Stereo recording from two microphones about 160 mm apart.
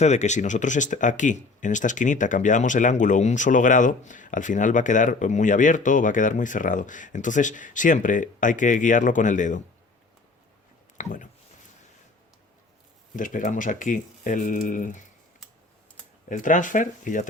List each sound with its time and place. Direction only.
0.0 s speech: 45° left (ahead or behind)
10.9 s speech: 55° left (ahead or behind)
13.1 s speech: 55° left (ahead or behind)
16.3 s speech: 55° left (ahead or behind)